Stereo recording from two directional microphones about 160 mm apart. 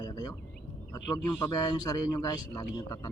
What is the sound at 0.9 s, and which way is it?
A man's voice, 25° left (ahead or behind).